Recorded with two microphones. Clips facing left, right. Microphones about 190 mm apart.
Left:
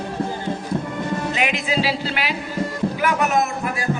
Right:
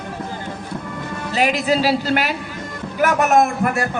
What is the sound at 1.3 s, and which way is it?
A man's voice, 40° right (ahead or behind).